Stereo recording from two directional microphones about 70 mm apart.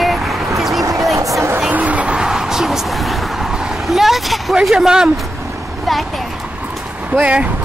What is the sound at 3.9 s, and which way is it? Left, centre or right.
Vehicle, centre.